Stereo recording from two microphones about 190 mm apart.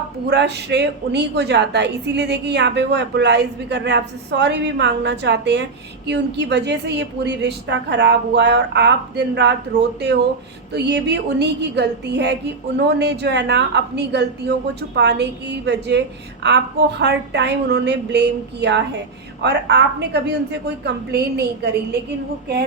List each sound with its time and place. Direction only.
0.3 s a woman's voice: 60° right (ahead or behind)
10.7 s a woman's voice: 60° right (ahead or behind)